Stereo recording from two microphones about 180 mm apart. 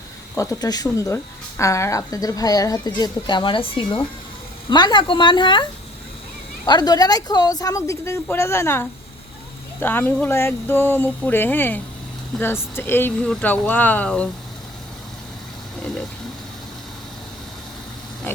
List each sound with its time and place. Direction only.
0.3 s a woman's voice: 20° left (ahead or behind)
6.7 s a woman's voice: 20° left (ahead or behind); by 14.3 s 5° left (ahead or behind)
18.3 s pig: 10° left (ahead or behind)